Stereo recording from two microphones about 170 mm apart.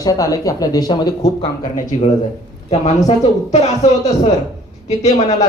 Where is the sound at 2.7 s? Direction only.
40° left (ahead or behind).